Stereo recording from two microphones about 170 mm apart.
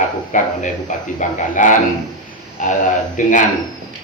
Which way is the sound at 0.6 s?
45° left (ahead or behind).